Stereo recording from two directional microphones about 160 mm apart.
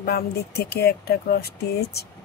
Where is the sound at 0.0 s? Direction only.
75° left (ahead or behind).